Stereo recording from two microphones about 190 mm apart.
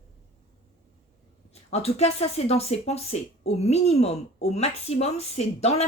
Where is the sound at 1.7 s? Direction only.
35° left (ahead or behind).